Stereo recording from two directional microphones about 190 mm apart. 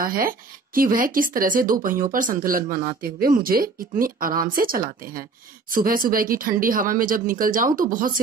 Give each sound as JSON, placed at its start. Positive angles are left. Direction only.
{"t": 0.0, "sound": "speech", "side_deg": -50}